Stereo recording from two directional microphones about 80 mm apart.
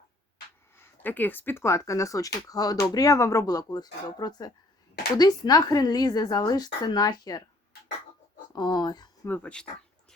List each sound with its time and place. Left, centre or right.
0.8 s speech: left
8.5 s speech: left
9.4 s speech: centre